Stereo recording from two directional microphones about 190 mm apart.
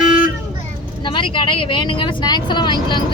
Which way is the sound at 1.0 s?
25° left (ahead or behind).